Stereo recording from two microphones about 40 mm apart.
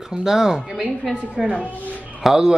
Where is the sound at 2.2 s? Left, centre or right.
Centre.